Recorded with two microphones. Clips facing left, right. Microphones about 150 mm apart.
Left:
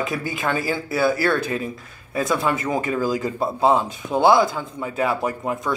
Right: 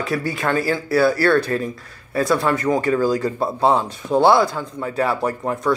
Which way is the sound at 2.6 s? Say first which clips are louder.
Right 5 dB; 5° left (ahead or behind).